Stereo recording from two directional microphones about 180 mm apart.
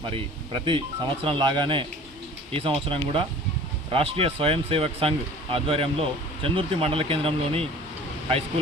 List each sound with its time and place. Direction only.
0.0 s speech: 25° right (ahead or behind)